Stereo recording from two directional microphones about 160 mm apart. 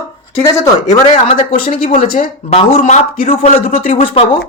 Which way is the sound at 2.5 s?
45° left (ahead or behind).